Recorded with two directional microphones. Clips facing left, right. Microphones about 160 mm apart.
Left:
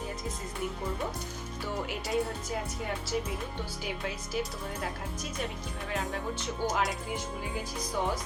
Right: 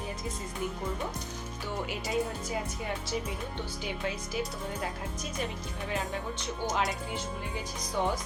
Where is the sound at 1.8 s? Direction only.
Centre (ahead or behind).